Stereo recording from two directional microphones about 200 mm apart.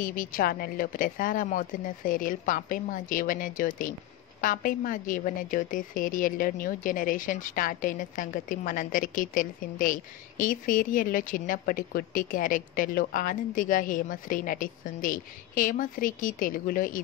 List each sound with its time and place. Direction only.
0.0 s a woman's voice: 45° left (ahead or behind)